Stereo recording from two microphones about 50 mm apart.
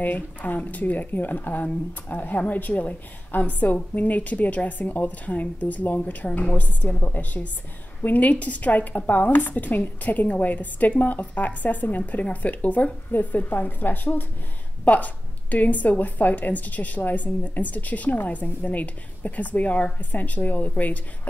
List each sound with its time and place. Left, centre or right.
0.0 s speech: left